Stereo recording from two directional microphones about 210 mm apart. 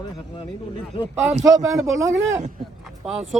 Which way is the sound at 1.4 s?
15° right (ahead or behind).